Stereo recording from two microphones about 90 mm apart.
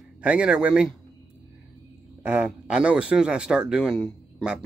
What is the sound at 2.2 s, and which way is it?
Speech, 15° right (ahead or behind).